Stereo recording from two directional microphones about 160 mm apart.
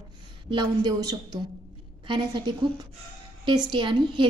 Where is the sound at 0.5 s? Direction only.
25° right (ahead or behind).